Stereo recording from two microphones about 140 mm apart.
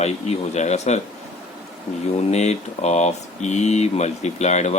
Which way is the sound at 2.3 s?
50° left (ahead or behind).